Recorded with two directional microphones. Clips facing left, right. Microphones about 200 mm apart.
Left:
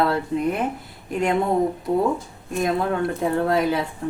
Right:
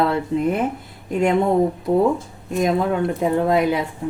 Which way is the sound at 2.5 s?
20° right (ahead or behind).